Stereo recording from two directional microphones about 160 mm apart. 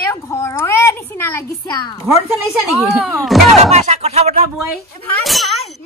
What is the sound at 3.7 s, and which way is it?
Speech, 45° right (ahead or behind).